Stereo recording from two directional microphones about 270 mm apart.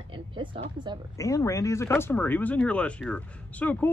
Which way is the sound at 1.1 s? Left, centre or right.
Centre.